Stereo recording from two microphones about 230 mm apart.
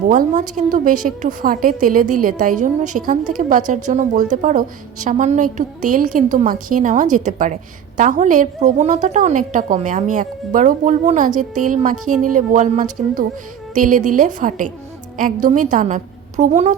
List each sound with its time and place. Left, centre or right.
0.1 s a woman's voice: right